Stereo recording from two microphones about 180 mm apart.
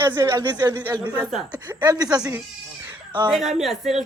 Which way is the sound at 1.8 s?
20° right (ahead or behind).